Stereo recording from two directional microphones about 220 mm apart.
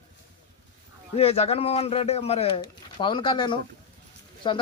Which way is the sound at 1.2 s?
30° left (ahead or behind).